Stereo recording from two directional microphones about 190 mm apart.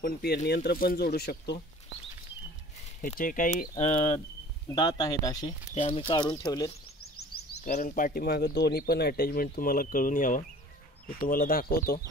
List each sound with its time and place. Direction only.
0.0 s speech: 55° left (ahead or behind)
3.0 s speech: 45° left (ahead or behind)
4.7 s speech: 20° left (ahead or behind)
5.8 s speech: 30° left (ahead or behind)
7.6 s speech: 40° left (ahead or behind)